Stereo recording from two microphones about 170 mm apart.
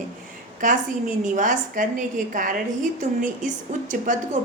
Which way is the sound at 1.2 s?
50° right (ahead or behind).